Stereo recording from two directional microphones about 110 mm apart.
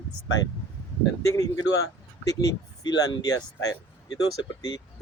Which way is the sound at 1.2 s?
30° left (ahead or behind).